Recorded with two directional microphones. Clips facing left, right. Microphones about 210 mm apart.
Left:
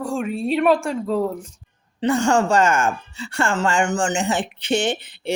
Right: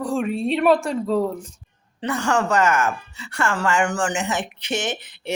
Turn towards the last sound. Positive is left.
turn(degrees=30)  # may be behind; listen again after turning